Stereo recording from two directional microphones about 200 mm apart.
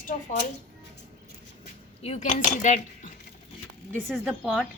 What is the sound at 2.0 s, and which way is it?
Speech, 30° left (ahead or behind).